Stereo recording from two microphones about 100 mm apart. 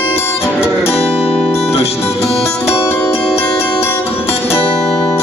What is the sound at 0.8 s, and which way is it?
Music, 80° left.